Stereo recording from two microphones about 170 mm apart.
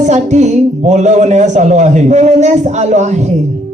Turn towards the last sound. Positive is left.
turn(degrees=-45)  # may be behind; listen again after turning